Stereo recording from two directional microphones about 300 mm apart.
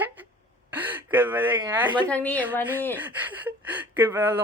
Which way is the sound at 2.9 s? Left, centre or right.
Centre.